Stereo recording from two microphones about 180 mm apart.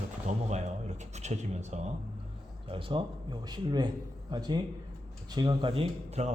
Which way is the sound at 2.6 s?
30° right (ahead or behind).